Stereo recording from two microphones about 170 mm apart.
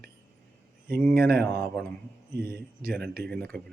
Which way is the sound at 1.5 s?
5° left (ahead or behind).